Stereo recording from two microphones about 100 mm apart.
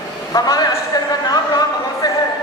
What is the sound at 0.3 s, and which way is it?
Speech, 40° left (ahead or behind).